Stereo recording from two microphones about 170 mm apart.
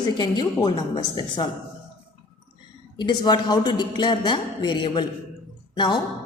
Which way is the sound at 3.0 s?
25° left (ahead or behind).